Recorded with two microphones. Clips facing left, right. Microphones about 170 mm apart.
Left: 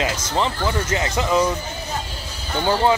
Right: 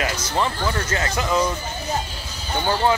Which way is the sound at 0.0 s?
20° left (ahead or behind).